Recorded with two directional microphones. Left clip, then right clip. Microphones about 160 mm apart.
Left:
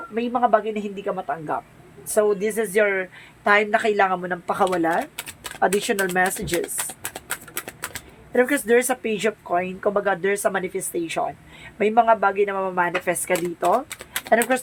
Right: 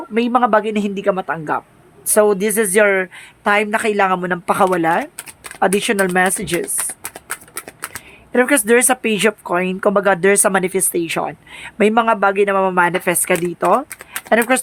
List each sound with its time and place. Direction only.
0.1 s speech: 70° right (ahead or behind); by 6.6 s 40° right (ahead or behind)
7.3 s a sound: 10° right (ahead or behind)
8.3 s speech: 45° right (ahead or behind)